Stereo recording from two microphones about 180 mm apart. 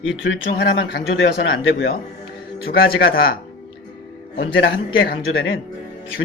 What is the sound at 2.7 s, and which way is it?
Speech, 55° left (ahead or behind).